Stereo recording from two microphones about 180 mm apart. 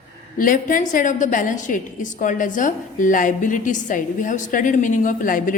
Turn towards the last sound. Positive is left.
turn(degrees=50)  # may be behind; listen again after turning